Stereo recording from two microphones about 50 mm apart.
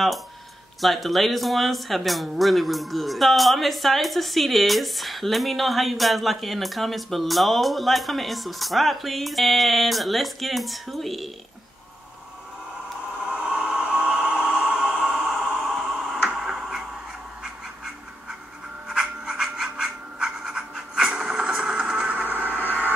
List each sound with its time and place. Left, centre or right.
0.7 s speech: centre
13.2 s a sound: centre
18.9 s scratch: centre
21.5 s vehicle: centre
22.1 s music: right